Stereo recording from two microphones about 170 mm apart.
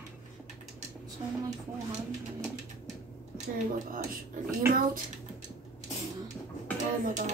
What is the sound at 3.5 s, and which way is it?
Speech, 55° right (ahead or behind).